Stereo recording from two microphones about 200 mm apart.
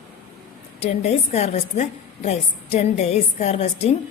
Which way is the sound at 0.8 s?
30° left (ahead or behind).